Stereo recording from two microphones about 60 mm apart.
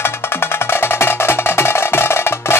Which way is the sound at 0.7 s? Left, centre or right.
Left.